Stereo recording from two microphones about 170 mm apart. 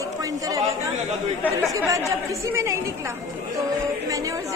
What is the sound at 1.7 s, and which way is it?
Speech, 20° right (ahead or behind).